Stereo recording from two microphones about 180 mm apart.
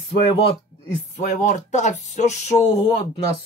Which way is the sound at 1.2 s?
45° left (ahead or behind).